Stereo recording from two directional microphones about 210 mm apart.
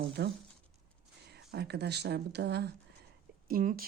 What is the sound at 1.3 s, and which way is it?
Speech, 50° right (ahead or behind).